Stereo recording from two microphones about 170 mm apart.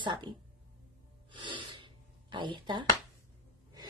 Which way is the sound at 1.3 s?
30° right (ahead or behind).